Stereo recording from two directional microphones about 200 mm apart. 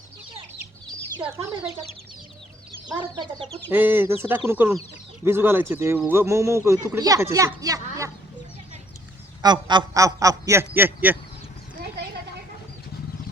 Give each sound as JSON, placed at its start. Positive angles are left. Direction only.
{"t": 1.2, "sound": "speech", "side_deg": -25}
{"t": 3.7, "sound": "speech", "side_deg": -10}
{"t": 9.4, "sound": "speech", "side_deg": -20}